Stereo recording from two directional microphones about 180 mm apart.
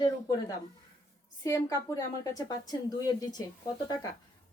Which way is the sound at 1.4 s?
20° left (ahead or behind).